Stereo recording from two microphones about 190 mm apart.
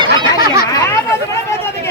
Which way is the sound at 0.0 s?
25° right (ahead or behind).